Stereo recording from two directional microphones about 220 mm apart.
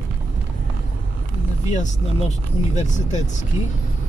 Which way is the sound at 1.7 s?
30° left (ahead or behind).